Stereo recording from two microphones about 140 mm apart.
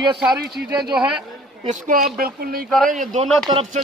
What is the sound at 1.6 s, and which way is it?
Speech, 85° right.